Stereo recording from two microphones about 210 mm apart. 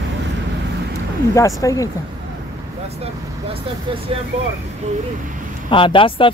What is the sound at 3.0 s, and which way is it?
Speech, 25° right (ahead or behind).